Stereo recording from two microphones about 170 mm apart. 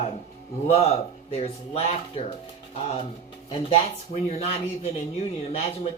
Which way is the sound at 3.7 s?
40° left (ahead or behind).